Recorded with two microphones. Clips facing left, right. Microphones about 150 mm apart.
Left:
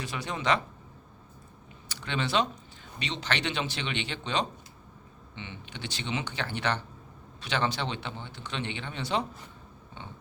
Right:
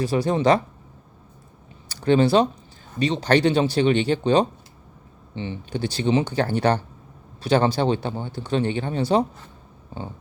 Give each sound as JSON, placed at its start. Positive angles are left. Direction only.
{"t": 0.0, "sound": "speech", "side_deg": -35}
{"t": 1.9, "sound": "speech", "side_deg": -40}